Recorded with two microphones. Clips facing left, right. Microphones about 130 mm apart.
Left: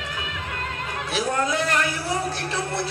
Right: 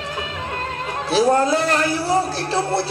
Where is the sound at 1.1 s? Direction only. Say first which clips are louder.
Right 9 dB; 30° right (ahead or behind).